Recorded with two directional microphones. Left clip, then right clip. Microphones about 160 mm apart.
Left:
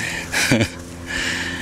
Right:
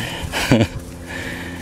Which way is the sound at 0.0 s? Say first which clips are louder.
Left 2 dB; 40° right (ahead or behind).